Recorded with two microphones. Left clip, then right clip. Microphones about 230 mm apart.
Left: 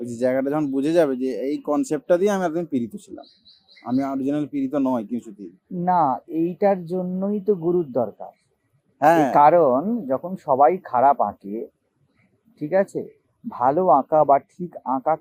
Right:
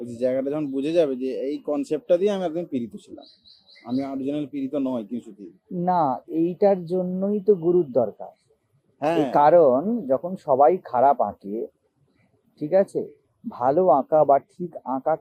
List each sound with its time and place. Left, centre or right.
0.0 s speech: left
5.8 s speech: centre
9.0 s a man's voice: left
9.3 s speech: centre
12.5 s speech: centre